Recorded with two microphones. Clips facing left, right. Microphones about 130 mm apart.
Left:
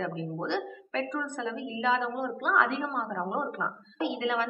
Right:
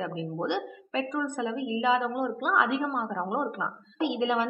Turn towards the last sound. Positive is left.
turn(degrees=-15)  # may be behind; listen again after turning